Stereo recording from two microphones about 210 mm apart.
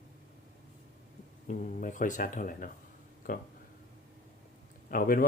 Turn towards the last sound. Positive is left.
turn(degrees=45)  # may be behind; listen again after turning